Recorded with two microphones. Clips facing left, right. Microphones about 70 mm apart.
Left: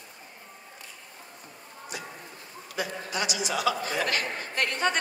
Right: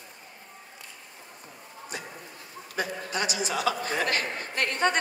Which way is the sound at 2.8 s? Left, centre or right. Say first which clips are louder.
Right 1 dB; right.